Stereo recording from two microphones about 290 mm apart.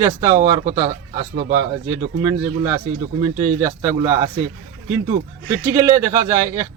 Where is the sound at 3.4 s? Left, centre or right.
Right.